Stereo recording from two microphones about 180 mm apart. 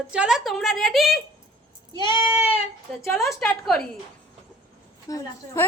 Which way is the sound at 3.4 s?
5° left (ahead or behind).